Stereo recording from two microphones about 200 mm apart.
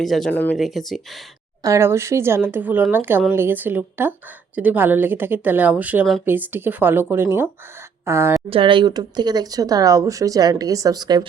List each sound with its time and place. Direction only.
0.0 s speech: centre (ahead or behind)
1.6 s speech: 15° right (ahead or behind)
8.4 s speech: 25° right (ahead or behind)